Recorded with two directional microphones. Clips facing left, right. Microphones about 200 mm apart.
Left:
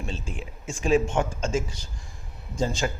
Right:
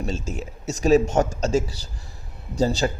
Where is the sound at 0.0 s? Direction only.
45° right (ahead or behind).